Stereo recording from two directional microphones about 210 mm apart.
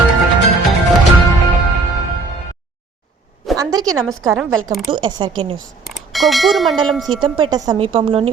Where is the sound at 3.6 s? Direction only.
15° right (ahead or behind).